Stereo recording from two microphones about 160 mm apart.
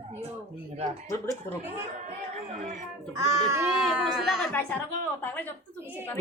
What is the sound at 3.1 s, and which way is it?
Speech, 20° right (ahead or behind).